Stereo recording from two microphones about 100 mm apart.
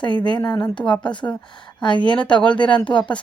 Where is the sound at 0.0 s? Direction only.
50° left (ahead or behind).